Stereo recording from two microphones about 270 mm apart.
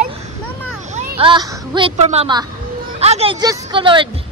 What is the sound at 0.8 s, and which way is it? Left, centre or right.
Speech, right.